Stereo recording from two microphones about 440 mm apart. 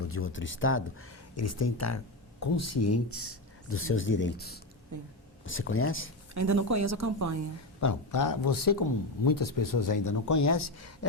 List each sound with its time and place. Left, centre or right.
0.1 s speech: left
6.3 s speech: right
7.8 s speech: left